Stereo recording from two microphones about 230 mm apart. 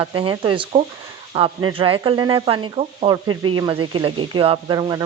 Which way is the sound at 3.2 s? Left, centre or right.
Right.